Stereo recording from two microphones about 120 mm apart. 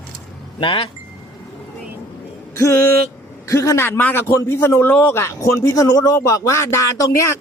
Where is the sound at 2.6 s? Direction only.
25° left (ahead or behind).